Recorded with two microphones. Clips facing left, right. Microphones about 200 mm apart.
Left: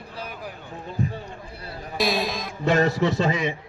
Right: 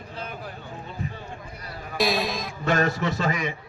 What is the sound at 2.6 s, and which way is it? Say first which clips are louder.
Speech: left 3 dB; 20° left (ahead or behind).